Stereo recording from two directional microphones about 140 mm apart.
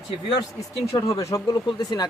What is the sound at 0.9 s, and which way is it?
Speech, 25° left (ahead or behind).